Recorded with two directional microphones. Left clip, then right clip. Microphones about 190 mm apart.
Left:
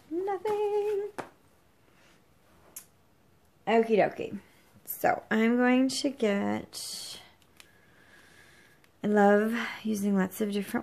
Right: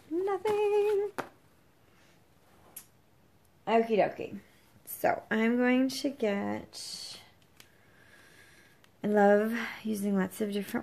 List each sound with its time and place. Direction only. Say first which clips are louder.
0.2 s female singing: right 1 dB; 5° right (ahead or behind)
3.6 s speech: left 2 dB; 25° left (ahead or behind)
4.8 s speech: left 2 dB; 20° left (ahead or behind)
8.1 s speech: left 1 dB; 10° left (ahead or behind)